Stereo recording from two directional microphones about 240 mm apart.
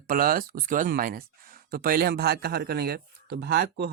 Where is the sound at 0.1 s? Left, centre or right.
Right.